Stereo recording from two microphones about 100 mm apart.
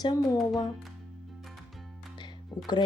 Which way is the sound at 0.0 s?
45° left (ahead or behind).